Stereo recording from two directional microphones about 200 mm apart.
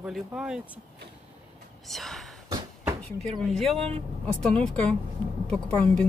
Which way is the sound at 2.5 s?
20° right (ahead or behind).